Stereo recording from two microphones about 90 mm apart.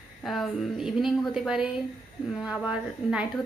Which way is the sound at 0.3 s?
Centre (ahead or behind).